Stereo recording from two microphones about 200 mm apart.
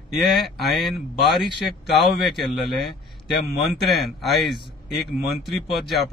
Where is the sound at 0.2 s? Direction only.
Centre (ahead or behind).